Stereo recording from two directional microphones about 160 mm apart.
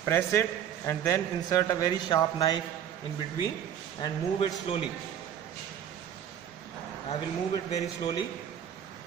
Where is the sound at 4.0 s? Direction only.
30° left (ahead or behind).